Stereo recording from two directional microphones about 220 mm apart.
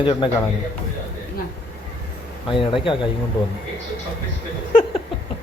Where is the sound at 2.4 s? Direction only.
25° left (ahead or behind).